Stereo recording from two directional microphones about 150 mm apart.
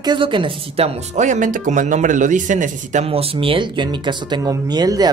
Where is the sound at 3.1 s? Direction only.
40° right (ahead or behind).